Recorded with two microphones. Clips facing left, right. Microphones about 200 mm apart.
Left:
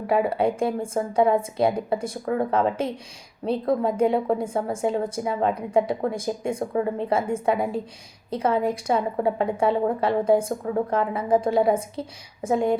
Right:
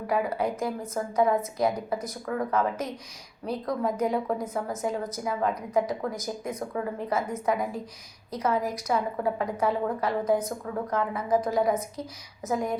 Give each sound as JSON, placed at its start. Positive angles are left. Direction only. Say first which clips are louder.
{"t": 0.1, "sound": "a woman's voice", "louder": "left 6 dB", "side_deg": 30}